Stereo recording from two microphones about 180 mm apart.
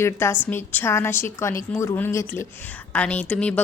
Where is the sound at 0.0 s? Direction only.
15° left (ahead or behind).